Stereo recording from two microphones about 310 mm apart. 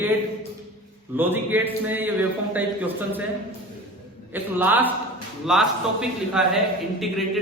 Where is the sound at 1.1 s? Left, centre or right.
Centre.